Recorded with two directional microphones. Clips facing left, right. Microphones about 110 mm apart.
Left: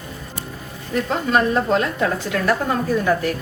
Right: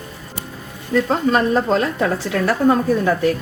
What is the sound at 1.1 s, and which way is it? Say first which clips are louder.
A woman's voice: even; 40° right (ahead or behind).